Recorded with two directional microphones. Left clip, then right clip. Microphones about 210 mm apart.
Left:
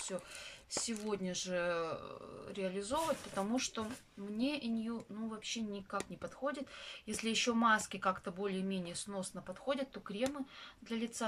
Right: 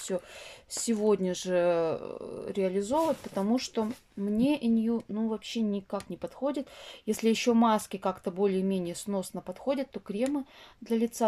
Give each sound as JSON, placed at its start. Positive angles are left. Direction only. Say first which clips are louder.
{"t": 0.1, "sound": "speech", "louder": "right 9 dB", "side_deg": -40}